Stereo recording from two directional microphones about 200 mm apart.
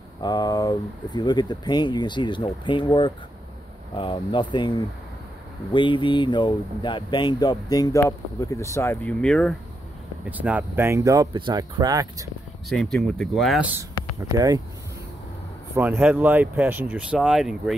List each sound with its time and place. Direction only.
0.2 s speech: 20° left (ahead or behind); by 9.6 s 5° left (ahead or behind)
10.3 s speech: 10° right (ahead or behind)
12.6 s speech: centre (ahead or behind)
14.3 s speech: 20° right (ahead or behind)
15.7 s speech: 10° right (ahead or behind)